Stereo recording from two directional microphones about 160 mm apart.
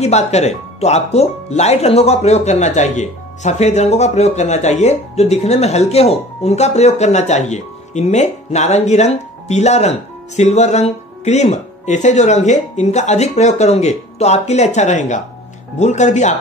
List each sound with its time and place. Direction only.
0.0 s speech: 45° left (ahead or behind)